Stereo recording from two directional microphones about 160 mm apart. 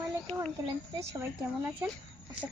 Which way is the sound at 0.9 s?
20° right (ahead or behind).